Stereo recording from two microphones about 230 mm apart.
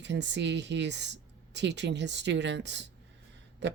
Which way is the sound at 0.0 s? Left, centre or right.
Right.